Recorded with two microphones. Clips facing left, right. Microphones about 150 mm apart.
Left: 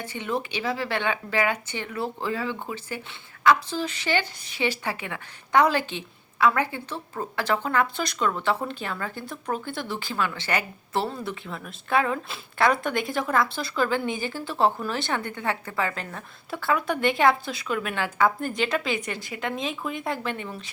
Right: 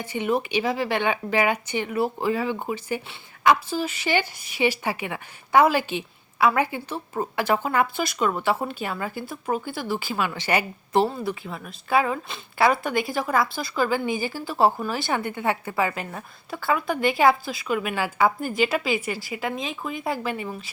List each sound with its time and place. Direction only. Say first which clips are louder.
0.0 s speech: right 5 dB; 15° right (ahead or behind)
11.1 s speech: right 3 dB; 5° right (ahead or behind)
16.5 s speech: right 1 dB; centre (ahead or behind)